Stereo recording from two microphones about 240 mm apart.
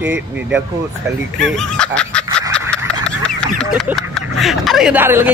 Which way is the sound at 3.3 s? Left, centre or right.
Centre.